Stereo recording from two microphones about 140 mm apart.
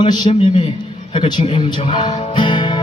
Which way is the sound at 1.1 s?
40° left (ahead or behind).